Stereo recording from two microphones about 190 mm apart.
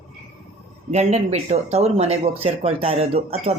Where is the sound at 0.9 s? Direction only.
35° right (ahead or behind).